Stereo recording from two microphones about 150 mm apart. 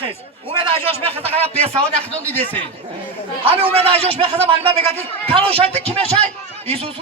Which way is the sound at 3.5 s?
40° right (ahead or behind).